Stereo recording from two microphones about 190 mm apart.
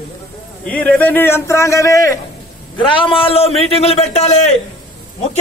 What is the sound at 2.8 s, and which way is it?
A man's voice, 30° left (ahead or behind).